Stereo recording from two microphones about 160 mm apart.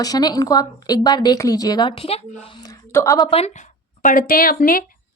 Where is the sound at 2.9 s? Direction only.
20° left (ahead or behind).